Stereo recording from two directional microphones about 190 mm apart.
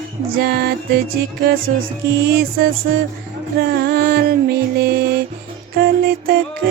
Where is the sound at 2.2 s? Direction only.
50° right (ahead or behind).